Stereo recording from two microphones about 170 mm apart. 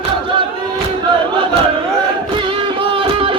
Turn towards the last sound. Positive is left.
turn(degrees=-30)  # may be behind; listen again after turning